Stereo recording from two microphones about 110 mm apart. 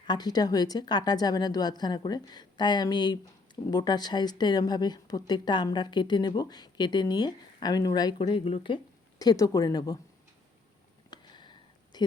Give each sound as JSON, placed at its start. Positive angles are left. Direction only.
{"t": 0.0, "sound": "a woman's voice", "side_deg": 40}
{"t": 8.2, "sound": "speech", "side_deg": 60}
{"t": 9.1, "sound": "a woman's voice", "side_deg": 35}
{"t": 11.1, "sound": "a sound", "side_deg": 40}